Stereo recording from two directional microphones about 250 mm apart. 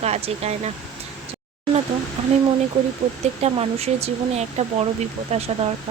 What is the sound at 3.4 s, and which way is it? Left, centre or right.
Speech, right.